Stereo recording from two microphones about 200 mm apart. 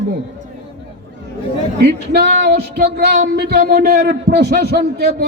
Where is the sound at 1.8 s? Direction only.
55° right (ahead or behind).